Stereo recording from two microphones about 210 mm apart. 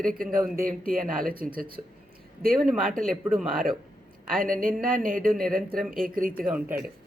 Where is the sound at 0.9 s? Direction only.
Centre (ahead or behind).